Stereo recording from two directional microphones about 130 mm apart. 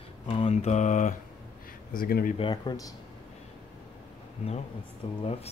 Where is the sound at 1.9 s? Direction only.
90° left.